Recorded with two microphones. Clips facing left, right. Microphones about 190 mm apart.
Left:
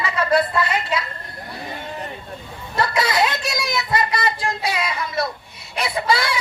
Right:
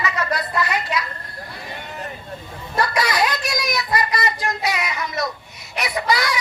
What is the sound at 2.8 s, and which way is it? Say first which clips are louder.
Child singing: left 1 dB; 25° left (ahead or behind).